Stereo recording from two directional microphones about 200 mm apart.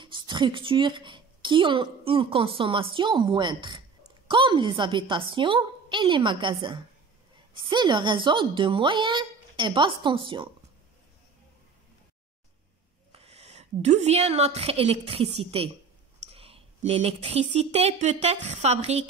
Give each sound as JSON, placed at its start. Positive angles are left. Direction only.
{"t": 0.0, "sound": "a woman's voice", "side_deg": -25}
{"t": 13.1, "sound": "a woman's voice", "side_deg": -30}